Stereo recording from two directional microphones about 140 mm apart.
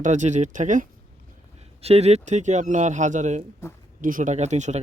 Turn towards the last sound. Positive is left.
turn(degrees=-55)  # may be behind; listen again after turning